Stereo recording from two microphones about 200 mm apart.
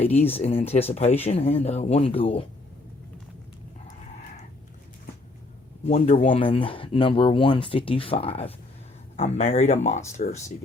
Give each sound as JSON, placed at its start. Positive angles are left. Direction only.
{"t": 0.1, "sound": "speech", "side_deg": 30}
{"t": 6.1, "sound": "speech", "side_deg": 25}